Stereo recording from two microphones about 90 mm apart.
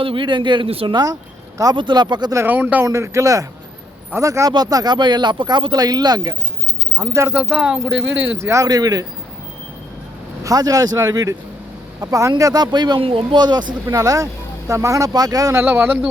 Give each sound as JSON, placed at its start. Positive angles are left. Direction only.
{"t": 0.0, "sound": "a man's voice", "side_deg": -75}
{"t": 1.7, "sound": "speech", "side_deg": -60}
{"t": 2.5, "sound": "a man's voice", "side_deg": -20}
{"t": 2.8, "sound": "speech", "side_deg": -35}
{"t": 7.3, "sound": "a man's voice", "side_deg": -20}
{"t": 7.6, "sound": "speech", "side_deg": -10}
{"t": 8.4, "sound": "speech", "side_deg": -30}
{"t": 8.6, "sound": "speech", "side_deg": -45}
{"t": 10.4, "sound": "speech", "side_deg": -40}
{"t": 13.0, "sound": "speech", "side_deg": -90}
{"t": 13.4, "sound": "speech", "side_deg": -55}
{"t": 13.8, "sound": "speech", "side_deg": -40}
{"t": 15.5, "sound": "a man's voice", "side_deg": -25}